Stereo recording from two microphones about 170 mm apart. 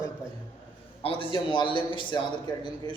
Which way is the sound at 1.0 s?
30° left (ahead or behind).